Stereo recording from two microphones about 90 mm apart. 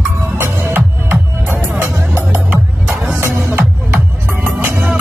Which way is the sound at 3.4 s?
30° right (ahead or behind).